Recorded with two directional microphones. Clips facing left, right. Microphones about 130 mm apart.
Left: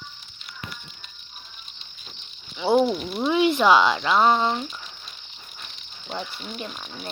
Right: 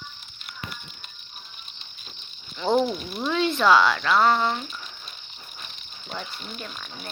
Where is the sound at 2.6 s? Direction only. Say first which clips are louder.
Left 3 dB; 5° left (ahead or behind).